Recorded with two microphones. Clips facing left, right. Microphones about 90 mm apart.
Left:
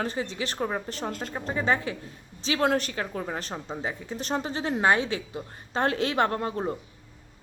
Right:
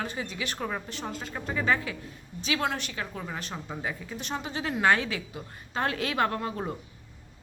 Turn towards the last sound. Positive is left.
turn(degrees=30)  # may be behind; listen again after turning